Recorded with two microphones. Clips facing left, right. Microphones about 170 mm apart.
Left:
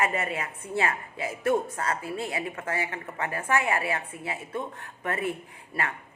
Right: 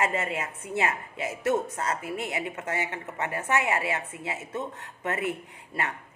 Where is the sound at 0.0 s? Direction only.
25° right (ahead or behind).